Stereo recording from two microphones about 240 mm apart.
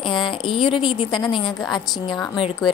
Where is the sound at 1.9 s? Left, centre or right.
Centre.